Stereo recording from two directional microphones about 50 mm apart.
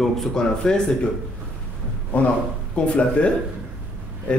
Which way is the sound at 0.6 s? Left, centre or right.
Centre.